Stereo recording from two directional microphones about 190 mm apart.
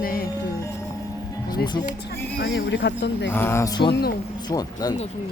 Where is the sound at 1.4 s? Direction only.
20° left (ahead or behind).